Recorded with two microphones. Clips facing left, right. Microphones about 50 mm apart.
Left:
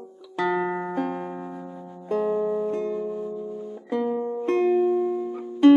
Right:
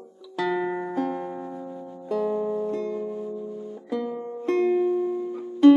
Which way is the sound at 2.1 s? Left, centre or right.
Left.